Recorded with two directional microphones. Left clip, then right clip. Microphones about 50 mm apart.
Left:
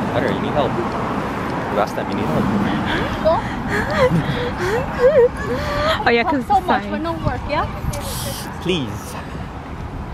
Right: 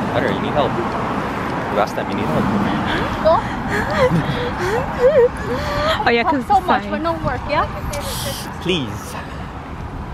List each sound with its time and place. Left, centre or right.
0.0 s vehicle: right
2.1 s speech: centre
8.7 s speech: right